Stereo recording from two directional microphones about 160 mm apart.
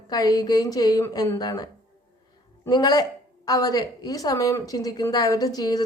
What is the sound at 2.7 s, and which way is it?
Speech, 25° left (ahead or behind).